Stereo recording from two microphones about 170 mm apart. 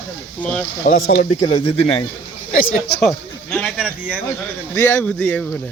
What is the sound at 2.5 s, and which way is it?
Speech, 55° left (ahead or behind).